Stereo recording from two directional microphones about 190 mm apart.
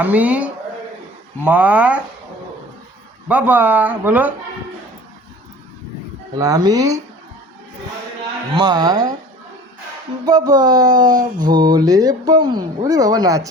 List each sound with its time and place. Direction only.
0.0 s speech: 10° right (ahead or behind)
3.2 s speech: 10° right (ahead or behind)
6.4 s speech: 20° right (ahead or behind)
8.5 s speech: 20° right (ahead or behind)
10.2 s speech: 20° right (ahead or behind)